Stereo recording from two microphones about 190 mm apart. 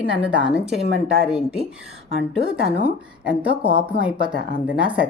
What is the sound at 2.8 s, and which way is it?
Speech, 5° right (ahead or behind).